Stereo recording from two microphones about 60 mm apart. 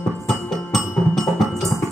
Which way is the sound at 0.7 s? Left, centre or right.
Centre.